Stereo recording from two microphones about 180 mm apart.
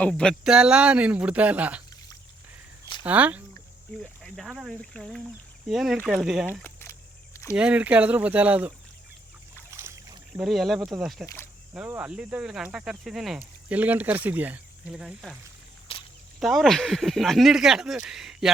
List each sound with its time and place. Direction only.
0.0 s speech: 5° left (ahead or behind)
3.0 s speech: 10° right (ahead or behind)
4.0 s speech: 10° left (ahead or behind)
4.4 s speech: centre (ahead or behind)
6.6 s keys jangling: 10° left (ahead or behind)
7.5 s speech: 5° right (ahead or behind)
9.7 s boat: 15° right (ahead or behind)
10.3 s speech: centre (ahead or behind)
15.9 s a sound: 30° left (ahead or behind)
16.4 s speech: centre (ahead or behind)